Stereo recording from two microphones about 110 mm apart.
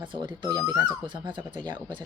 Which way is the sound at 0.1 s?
45° right (ahead or behind).